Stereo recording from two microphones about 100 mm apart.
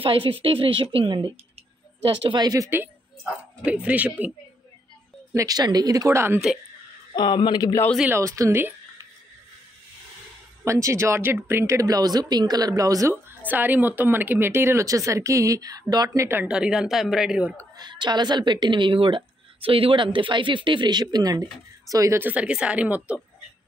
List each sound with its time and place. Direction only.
0.0 s a woman's voice: 65° right (ahead or behind); by 2.7 s 40° right (ahead or behind)
3.6 s speech: 15° right (ahead or behind)
5.3 s speech: 35° right (ahead or behind)
7.2 s speech: 50° left (ahead or behind)
8.1 s speech: 30° right (ahead or behind)
10.6 s speech: 30° right (ahead or behind)
13.1 s speech: 20° right (ahead or behind); by 16.3 s 40° right (ahead or behind)
16.4 s a woman's voice: 10° right (ahead or behind)
17.6 s a woman's voice: 45° right (ahead or behind)
22.2 s speech: 15° right (ahead or behind)